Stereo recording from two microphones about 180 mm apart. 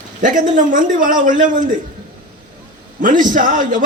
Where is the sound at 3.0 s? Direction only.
50° right (ahead or behind).